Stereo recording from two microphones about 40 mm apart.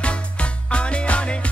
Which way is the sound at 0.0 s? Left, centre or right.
Left.